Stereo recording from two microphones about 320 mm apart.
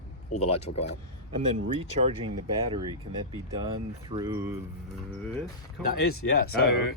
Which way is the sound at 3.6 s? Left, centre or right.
Centre.